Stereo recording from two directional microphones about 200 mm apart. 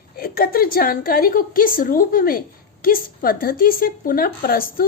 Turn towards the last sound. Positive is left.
turn(degrees=45)  # may be behind; listen again after turning